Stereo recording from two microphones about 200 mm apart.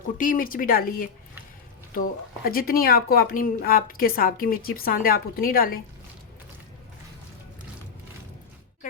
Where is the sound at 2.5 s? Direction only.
45° left (ahead or behind).